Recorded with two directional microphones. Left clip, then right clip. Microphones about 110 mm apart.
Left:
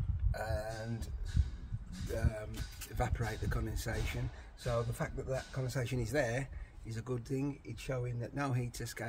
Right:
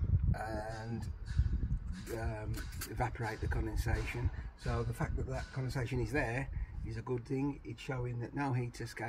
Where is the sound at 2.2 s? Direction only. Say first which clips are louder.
Left 1 dB; 25° left (ahead or behind).